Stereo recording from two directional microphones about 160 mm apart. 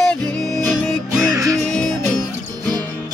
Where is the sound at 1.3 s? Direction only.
20° right (ahead or behind).